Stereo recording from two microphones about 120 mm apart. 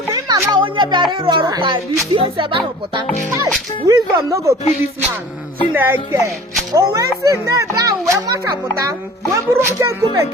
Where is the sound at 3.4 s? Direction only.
30° right (ahead or behind).